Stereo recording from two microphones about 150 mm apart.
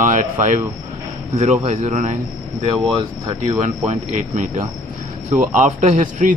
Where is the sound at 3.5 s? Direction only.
50° right (ahead or behind).